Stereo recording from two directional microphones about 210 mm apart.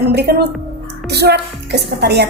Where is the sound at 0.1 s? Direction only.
50° right (ahead or behind).